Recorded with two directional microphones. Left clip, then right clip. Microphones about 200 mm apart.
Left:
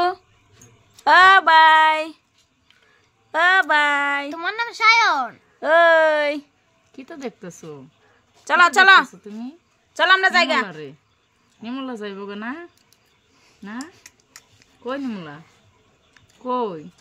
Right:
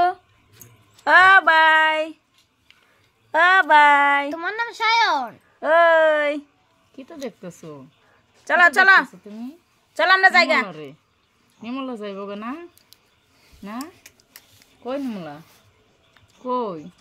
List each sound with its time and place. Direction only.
1.0 s a sound: 5° left (ahead or behind)
3.3 s speech: 5° right (ahead or behind)
5.6 s speech: 10° left (ahead or behind)
7.0 s a woman's voice: 25° left (ahead or behind); by 10.7 s centre (ahead or behind)
10.7 s speech: 20° left (ahead or behind)
14.0 s a sound: 10° right (ahead or behind)
14.8 s speech: 15° left (ahead or behind)
16.4 s speech: 20° left (ahead or behind)